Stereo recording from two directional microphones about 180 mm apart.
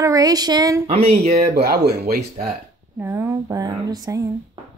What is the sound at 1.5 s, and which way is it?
Speech, 60° right (ahead or behind).